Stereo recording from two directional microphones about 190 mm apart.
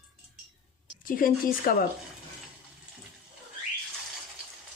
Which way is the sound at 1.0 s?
45° left (ahead or behind).